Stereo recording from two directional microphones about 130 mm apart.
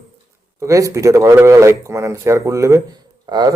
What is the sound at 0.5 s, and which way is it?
Speech, 25° right (ahead or behind).